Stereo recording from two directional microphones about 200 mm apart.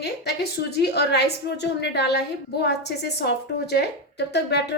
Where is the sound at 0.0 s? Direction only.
55° left (ahead or behind).